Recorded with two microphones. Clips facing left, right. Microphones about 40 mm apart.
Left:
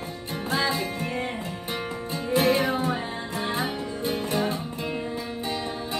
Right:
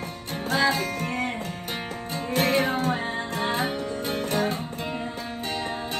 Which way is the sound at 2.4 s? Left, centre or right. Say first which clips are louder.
Even; right.